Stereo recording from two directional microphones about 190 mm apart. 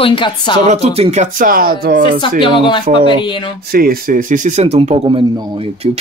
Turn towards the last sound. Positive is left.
turn(degrees=-30)  # may be behind; listen again after turning